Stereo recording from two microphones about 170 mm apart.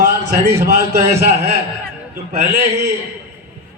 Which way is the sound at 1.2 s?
40° right (ahead or behind).